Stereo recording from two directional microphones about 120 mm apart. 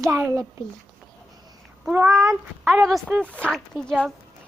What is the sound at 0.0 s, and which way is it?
Speech, 25° right (ahead or behind).